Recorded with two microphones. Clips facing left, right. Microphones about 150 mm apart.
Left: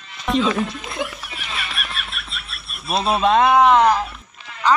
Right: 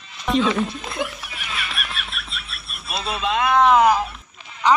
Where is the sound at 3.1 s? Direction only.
45° left (ahead or behind).